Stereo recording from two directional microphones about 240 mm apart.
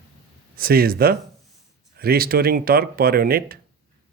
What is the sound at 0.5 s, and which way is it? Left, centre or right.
Speech, right.